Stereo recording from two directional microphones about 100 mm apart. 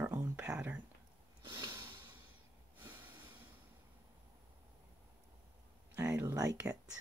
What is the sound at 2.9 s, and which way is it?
Snort, 20° right (ahead or behind).